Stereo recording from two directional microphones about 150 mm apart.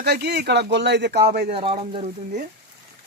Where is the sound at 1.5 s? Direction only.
40° right (ahead or behind).